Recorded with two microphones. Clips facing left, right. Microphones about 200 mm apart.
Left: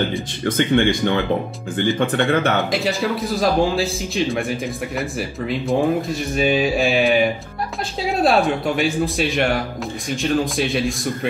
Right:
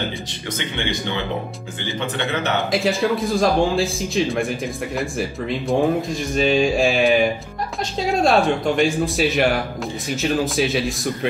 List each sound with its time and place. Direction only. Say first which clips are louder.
0.6 s speech: left 10 dB; 50° left (ahead or behind)
2.7 s a man's voice: right 2 dB; centre (ahead or behind)